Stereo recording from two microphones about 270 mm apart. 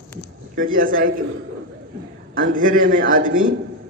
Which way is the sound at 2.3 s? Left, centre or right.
Right.